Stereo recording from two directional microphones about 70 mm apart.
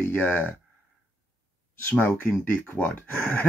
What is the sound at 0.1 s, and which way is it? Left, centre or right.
Speech, left.